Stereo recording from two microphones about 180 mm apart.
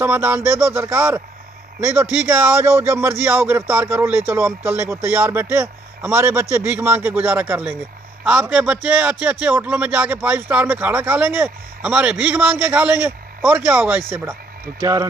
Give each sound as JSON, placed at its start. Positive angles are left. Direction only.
{"t": 0.0, "sound": "a man's voice", "side_deg": -10}